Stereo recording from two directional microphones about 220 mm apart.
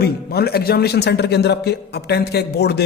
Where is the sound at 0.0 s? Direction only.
45° left (ahead or behind).